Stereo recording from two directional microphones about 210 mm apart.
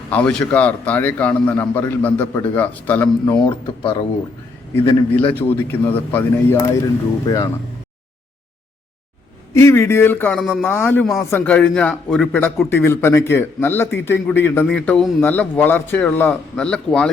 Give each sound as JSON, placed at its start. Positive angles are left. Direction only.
{"t": 0.1, "sound": "a man's voice", "side_deg": 5}
{"t": 3.4, "sound": "speech", "side_deg": 25}
{"t": 5.1, "sound": "a man's voice", "side_deg": 10}
{"t": 9.6, "sound": "a man's voice", "side_deg": 10}